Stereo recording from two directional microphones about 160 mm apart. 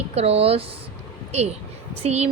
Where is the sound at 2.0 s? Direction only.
40° right (ahead or behind).